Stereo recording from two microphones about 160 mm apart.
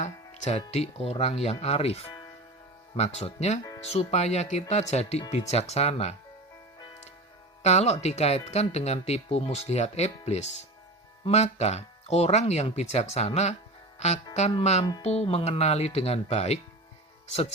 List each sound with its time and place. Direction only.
0.0 s speech: 45° left (ahead or behind)
7.6 s speech: 45° left (ahead or behind)
14.6 s speech: 40° left (ahead or behind)